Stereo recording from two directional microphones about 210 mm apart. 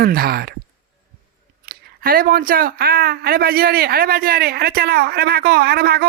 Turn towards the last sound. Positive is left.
turn(degrees=-45)  # may be behind; listen again after turning